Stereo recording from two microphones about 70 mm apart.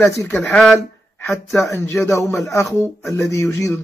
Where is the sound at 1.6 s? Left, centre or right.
Left.